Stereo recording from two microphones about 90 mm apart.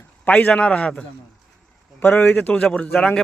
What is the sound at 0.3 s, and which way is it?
A man's voice, 15° left (ahead or behind).